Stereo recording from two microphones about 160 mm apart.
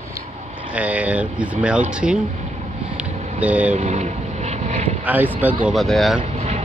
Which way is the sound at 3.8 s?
45° right (ahead or behind).